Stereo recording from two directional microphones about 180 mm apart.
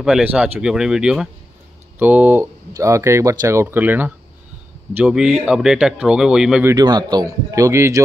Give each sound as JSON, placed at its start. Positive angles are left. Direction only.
{"t": 0.0, "sound": "speech", "side_deg": -5}
{"t": 6.7, "sound": "a man's voice", "side_deg": -20}